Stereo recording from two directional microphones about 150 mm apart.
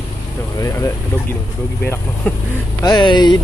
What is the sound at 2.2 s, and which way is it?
Speech, 10° left (ahead or behind).